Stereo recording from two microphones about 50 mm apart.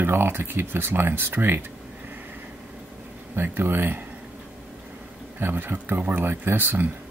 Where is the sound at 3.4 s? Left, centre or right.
Right.